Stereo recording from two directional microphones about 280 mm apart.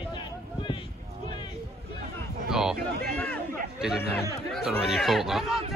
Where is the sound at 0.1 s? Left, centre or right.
Centre.